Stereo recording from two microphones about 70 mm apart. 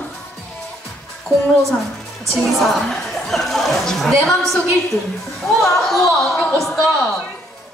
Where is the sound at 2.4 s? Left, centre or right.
Centre.